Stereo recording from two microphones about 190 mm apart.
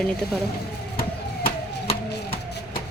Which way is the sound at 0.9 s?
50° left (ahead or behind).